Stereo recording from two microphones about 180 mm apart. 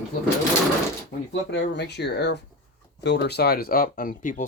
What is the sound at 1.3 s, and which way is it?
Speech, 80° left.